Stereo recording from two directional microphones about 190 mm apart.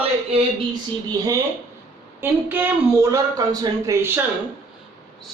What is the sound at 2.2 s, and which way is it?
A woman's voice, 10° right (ahead or behind).